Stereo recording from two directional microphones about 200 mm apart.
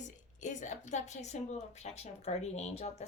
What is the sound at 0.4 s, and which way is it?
Speech, 35° left (ahead or behind).